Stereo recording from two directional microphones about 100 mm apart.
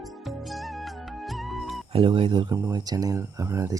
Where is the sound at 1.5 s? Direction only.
Centre (ahead or behind).